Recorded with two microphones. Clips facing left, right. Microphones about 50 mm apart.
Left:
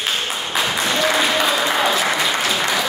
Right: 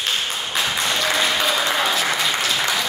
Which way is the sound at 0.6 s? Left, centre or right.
Centre.